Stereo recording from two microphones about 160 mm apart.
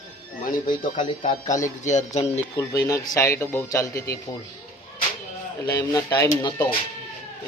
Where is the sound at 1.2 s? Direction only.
50° left (ahead or behind).